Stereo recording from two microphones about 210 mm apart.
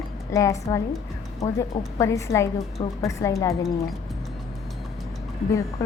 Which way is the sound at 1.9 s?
15° left (ahead or behind).